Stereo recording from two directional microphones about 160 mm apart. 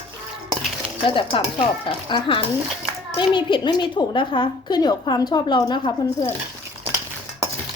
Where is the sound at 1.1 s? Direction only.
30° left (ahead or behind).